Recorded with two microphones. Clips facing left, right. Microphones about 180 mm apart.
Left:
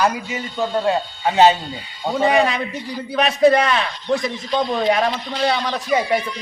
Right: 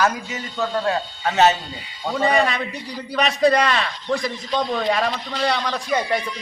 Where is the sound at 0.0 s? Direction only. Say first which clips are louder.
Left 2 dB; 15° left (ahead or behind).